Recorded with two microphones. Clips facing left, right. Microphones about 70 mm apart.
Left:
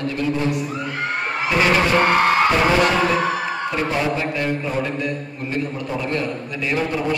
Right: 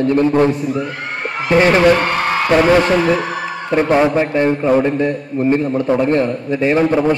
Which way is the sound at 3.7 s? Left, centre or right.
Right.